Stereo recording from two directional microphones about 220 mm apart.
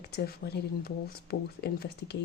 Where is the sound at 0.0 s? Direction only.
45° left (ahead or behind).